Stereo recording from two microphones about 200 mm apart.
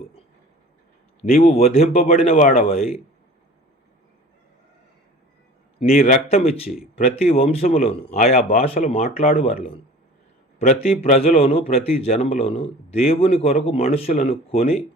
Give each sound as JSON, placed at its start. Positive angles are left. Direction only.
{"t": 1.4, "sound": "a man's voice", "side_deg": 30}
{"t": 2.2, "sound": "a man's voice", "side_deg": 40}
{"t": 5.9, "sound": "a man's voice", "side_deg": 45}
{"t": 6.3, "sound": "a man's voice", "side_deg": 30}
{"t": 10.8, "sound": "a man's voice", "side_deg": 30}